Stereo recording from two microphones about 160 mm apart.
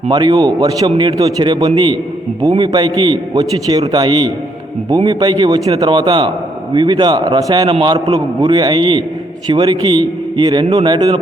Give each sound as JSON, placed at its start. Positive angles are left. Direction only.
{"t": 0.1, "sound": "a man's voice", "side_deg": -25}